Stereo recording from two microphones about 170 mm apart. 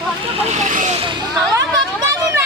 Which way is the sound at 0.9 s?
30° right (ahead or behind).